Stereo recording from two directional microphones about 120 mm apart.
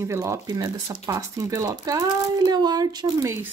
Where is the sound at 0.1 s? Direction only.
25° right (ahead or behind).